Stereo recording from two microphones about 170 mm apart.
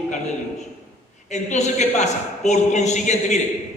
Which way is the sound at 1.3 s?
45° left (ahead or behind).